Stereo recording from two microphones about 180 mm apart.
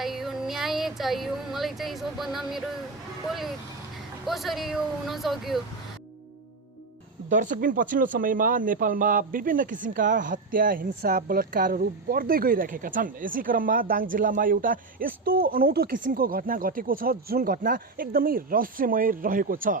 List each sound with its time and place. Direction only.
0.0 s speech: centre (ahead or behind)
7.3 s speech: 45° right (ahead or behind)